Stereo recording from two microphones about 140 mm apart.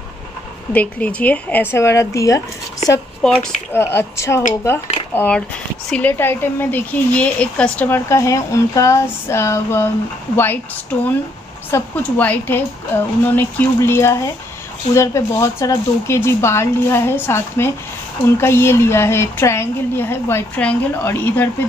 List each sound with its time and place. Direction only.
0.7 s speech: 10° left (ahead or behind)
3.2 s speech: 5° left (ahead or behind)
3.7 s speech: 15° left (ahead or behind)